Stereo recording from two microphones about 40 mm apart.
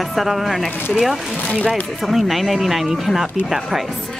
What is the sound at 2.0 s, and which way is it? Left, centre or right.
A woman's voice, centre.